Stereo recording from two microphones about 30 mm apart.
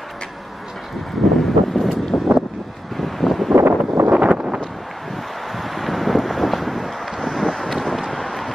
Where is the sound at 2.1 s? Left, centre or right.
Left.